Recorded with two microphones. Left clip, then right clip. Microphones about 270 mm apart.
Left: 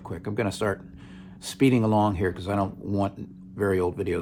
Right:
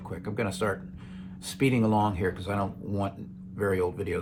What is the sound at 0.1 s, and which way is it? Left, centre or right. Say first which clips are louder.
Speech: left 3 dB; left.